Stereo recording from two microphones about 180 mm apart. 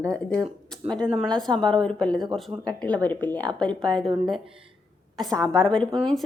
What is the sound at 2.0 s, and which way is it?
Speech, 25° right (ahead or behind).